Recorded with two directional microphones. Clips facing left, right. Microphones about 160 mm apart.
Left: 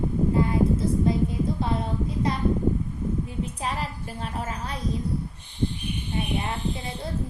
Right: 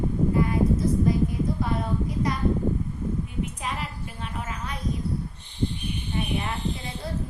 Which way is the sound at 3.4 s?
35° left (ahead or behind).